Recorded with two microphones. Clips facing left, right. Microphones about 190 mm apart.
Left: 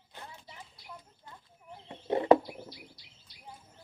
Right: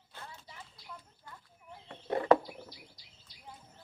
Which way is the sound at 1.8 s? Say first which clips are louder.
Left 3 dB; 20° left (ahead or behind).